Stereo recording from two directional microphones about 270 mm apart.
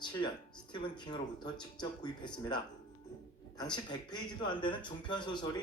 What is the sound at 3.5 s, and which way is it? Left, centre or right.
Speech, centre.